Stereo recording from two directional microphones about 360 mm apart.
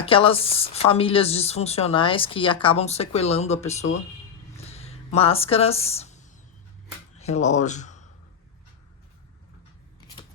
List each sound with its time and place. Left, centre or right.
0.0 s speech: centre
4.5 s a sound: centre
7.2 s speech: centre